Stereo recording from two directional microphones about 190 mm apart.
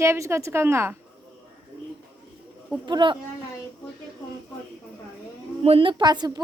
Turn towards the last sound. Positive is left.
turn(degrees=-20)  # may be behind; listen again after turning